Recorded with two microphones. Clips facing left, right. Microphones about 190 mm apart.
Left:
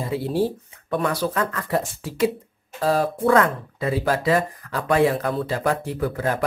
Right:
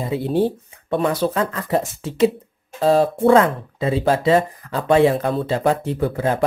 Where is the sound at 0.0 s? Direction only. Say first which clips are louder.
Right 3 dB; 20° right (ahead or behind).